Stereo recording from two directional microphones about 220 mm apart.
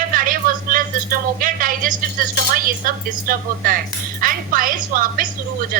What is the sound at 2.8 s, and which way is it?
A woman's voice, 40° right (ahead or behind).